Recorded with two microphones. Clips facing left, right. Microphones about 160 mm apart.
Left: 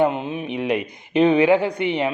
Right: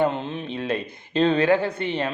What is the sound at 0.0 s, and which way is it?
Speech, 10° left (ahead or behind).